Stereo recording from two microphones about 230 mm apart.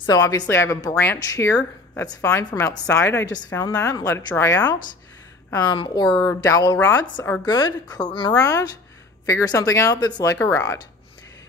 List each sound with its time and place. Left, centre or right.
0.0 s speech: centre